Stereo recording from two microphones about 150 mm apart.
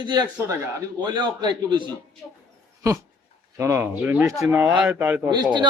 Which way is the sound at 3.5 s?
20° right (ahead or behind).